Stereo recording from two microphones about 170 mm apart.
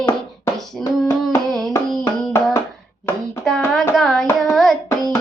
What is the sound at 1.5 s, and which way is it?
Hands, centre (ahead or behind).